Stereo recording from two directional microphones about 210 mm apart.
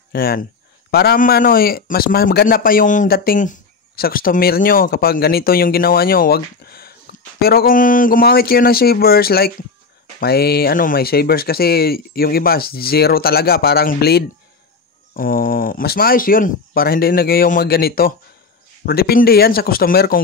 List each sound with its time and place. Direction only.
0.1 s a man's voice: 45° left (ahead or behind)